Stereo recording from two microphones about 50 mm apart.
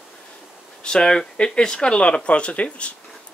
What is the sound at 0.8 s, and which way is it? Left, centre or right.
Speech, centre.